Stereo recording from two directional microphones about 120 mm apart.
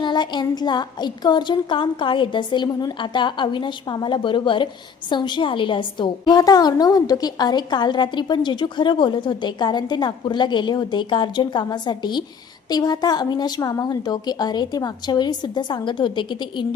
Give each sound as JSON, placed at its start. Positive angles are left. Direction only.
{"t": 0.0, "sound": "a woman's voice", "side_deg": 40}